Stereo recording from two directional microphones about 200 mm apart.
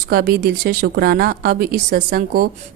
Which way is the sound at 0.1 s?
50° right (ahead or behind).